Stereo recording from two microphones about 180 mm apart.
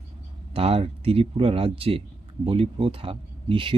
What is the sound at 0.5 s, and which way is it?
Speech, 35° right (ahead or behind).